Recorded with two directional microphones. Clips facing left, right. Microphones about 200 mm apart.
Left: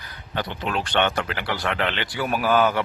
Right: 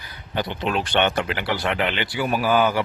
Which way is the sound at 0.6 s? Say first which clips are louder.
Right 2 dB; 20° right (ahead or behind).